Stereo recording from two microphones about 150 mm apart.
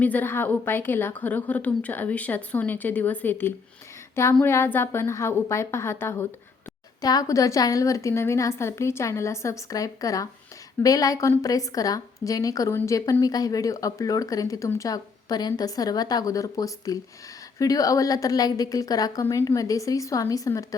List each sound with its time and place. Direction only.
0.0 s a woman's voice: 10° left (ahead or behind)